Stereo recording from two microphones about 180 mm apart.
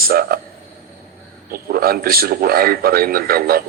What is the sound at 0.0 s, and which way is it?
Speech, 55° right (ahead or behind).